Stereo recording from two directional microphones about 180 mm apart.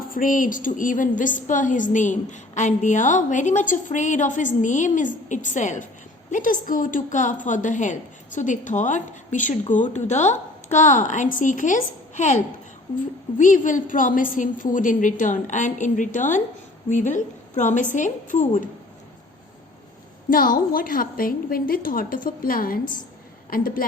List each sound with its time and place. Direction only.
0.0 s a woman's voice: 50° left (ahead or behind)
13.4 s a woman's voice: 45° left (ahead or behind)
20.3 s a woman's voice: 50° left (ahead or behind)